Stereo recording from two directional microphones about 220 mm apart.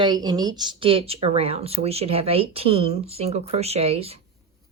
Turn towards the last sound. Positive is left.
turn(degrees=-25)  # may be behind; listen again after turning